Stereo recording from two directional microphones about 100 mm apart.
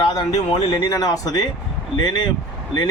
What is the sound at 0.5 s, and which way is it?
Speech, 50° left (ahead or behind).